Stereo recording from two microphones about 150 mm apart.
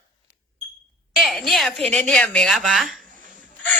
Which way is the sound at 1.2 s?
Centre (ahead or behind).